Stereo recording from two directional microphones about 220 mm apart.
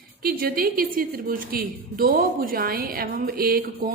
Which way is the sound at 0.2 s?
40° right (ahead or behind).